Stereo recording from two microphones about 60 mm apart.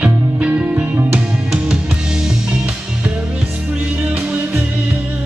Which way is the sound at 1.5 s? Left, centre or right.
Centre.